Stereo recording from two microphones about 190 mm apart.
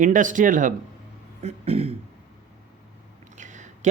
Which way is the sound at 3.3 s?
40° right (ahead or behind).